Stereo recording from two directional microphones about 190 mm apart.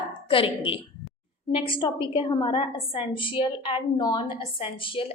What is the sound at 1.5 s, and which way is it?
A woman's voice, 25° left (ahead or behind).